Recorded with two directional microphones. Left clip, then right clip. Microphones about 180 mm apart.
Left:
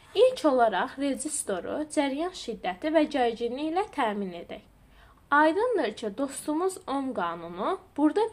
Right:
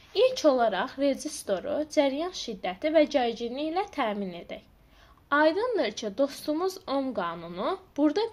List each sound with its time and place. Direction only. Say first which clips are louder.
0.1 s a woman's voice: left 1 dB; 30° right (ahead or behind)